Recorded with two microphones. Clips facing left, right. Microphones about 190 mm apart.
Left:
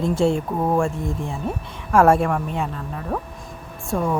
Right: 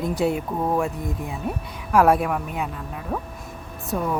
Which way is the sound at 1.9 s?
5° right (ahead or behind).